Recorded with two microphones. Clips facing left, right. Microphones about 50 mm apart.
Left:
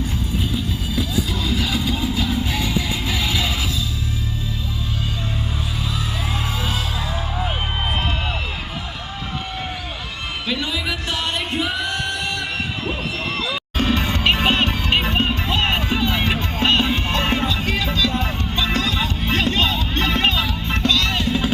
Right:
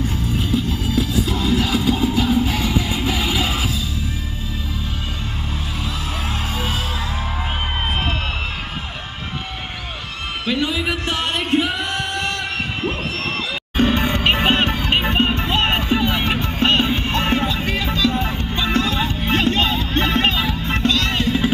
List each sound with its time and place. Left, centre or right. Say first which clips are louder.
0.5 s music: right 4 dB; right
1.3 s music: right 4 dB; right
10.4 s music: right 4 dB; right
13.7 s music: right 4 dB; right